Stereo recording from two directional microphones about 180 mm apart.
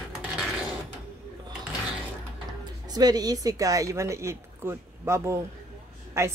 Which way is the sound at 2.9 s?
20° right (ahead or behind).